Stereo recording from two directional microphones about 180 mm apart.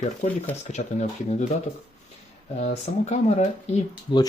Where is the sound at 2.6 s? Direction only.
40° left (ahead or behind).